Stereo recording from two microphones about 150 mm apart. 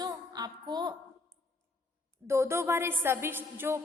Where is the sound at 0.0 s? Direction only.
25° right (ahead or behind).